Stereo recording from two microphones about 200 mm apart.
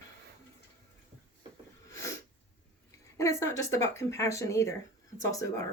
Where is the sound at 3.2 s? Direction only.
15° left (ahead or behind).